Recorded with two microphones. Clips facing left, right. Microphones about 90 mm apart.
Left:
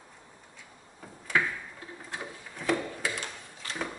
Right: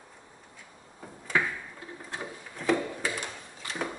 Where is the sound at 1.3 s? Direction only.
Centre (ahead or behind).